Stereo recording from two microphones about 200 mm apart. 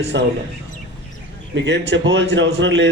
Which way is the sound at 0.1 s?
65° right (ahead or behind).